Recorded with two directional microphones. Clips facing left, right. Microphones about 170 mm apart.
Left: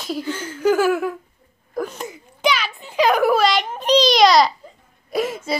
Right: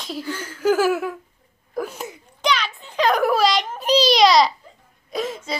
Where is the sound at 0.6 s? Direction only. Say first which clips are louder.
Left 1 dB; 5° right (ahead or behind).